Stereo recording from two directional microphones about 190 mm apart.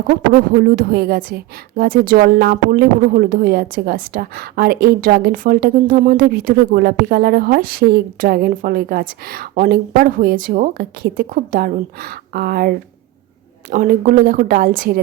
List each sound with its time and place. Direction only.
0.5 s a woman's voice: 55° right (ahead or behind)